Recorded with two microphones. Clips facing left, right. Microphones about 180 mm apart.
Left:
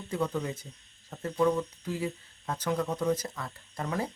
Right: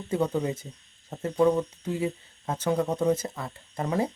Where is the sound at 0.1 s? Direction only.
30° right (ahead or behind).